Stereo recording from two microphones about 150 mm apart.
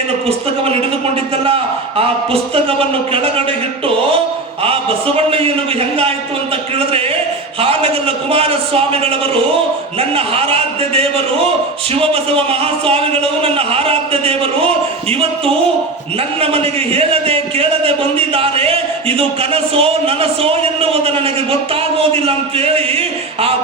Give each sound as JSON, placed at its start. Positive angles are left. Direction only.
{"t": 0.3, "sound": "a man's voice", "side_deg": -40}
{"t": 4.6, "sound": "a man's voice", "side_deg": -40}
{"t": 7.6, "sound": "a man's voice", "side_deg": -40}